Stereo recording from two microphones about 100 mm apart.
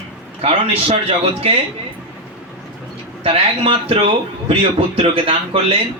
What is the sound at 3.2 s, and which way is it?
Speech, 60° right (ahead or behind).